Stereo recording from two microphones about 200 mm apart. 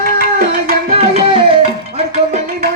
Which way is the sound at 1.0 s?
30° right (ahead or behind).